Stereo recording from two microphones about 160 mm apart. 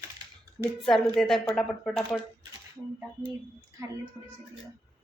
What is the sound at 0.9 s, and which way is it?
Speech, centre (ahead or behind).